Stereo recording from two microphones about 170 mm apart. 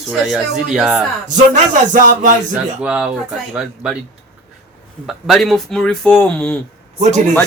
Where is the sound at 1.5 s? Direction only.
50° right (ahead or behind).